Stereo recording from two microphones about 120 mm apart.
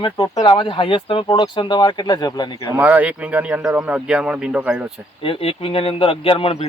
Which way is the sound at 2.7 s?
15° right (ahead or behind).